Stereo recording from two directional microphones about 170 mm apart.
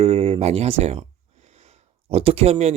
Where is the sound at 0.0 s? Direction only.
35° right (ahead or behind).